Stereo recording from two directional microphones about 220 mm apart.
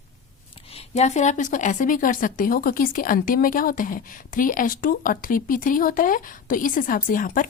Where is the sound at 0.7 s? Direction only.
30° left (ahead or behind).